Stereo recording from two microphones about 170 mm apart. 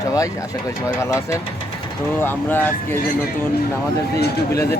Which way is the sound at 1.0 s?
15° left (ahead or behind).